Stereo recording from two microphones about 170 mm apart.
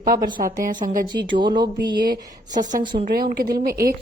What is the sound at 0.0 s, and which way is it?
A woman's voice, 55° right (ahead or behind).